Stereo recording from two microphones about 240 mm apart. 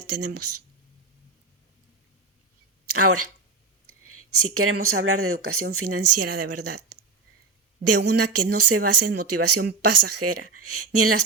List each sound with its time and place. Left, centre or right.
0.1 s speech: right
2.8 s speech: right